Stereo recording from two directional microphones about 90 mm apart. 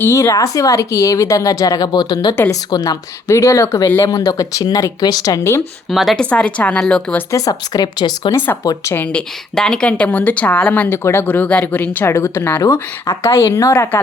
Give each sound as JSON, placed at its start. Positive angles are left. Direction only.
{"t": 0.0, "sound": "speech", "side_deg": 30}
{"t": 3.3, "sound": "speech", "side_deg": 35}
{"t": 5.9, "sound": "a woman's voice", "side_deg": -5}
{"t": 6.1, "sound": "a woman's voice", "side_deg": 15}
{"t": 7.3, "sound": "speech", "side_deg": 40}
{"t": 9.1, "sound": "speech", "side_deg": 5}